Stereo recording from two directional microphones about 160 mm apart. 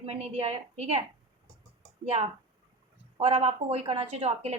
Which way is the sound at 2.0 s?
40° right (ahead or behind).